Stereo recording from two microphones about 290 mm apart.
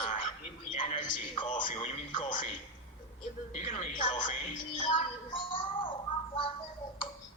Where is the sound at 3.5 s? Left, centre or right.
Left.